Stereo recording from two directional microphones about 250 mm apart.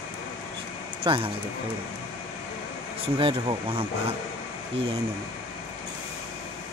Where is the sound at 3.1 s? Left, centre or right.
Right.